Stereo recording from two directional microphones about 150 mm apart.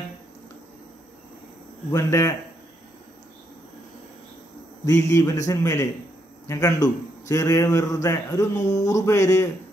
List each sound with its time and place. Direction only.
1.9 s a man's voice: 20° left (ahead or behind)
4.8 s a man's voice: 20° left (ahead or behind)